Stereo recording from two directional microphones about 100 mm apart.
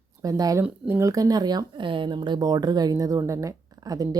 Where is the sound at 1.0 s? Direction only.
35° right (ahead or behind).